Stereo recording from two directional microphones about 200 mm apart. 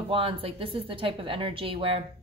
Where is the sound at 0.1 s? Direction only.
25° right (ahead or behind).